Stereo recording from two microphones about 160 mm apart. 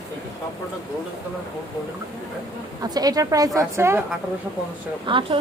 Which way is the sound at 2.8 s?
25° right (ahead or behind).